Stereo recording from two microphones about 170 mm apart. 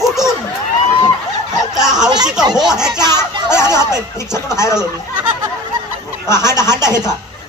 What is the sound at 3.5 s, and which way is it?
Speech, 15° left (ahead or behind).